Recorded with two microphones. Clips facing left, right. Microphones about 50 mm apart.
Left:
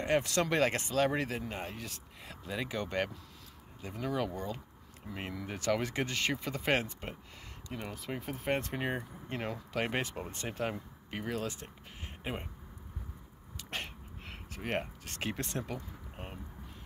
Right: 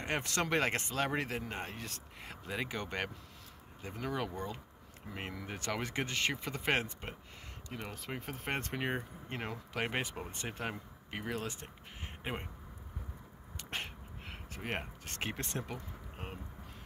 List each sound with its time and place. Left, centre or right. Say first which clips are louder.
0.0 s speech: left 5 dB; right
2.5 s speech: left 3 dB; right
7.7 s speech: left 2 dB; centre
8.2 s speech: left 5 dB; right
8.9 s speech: left 1 dB; right
11.4 s speech: left 3 dB; right
13.7 s a sound: left 1 dB; right
15.0 s speech: left 2 dB; right